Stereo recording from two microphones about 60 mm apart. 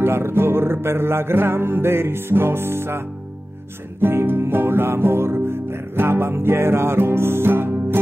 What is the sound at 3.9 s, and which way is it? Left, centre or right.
Music, right.